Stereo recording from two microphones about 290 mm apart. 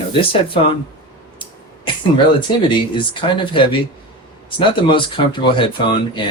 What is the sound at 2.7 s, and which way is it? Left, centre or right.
Speech, centre.